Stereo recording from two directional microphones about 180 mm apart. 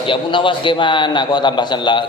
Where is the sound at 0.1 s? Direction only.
25° left (ahead or behind).